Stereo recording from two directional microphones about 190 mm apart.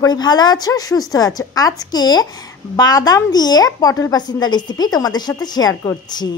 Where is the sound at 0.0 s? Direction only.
20° left (ahead or behind).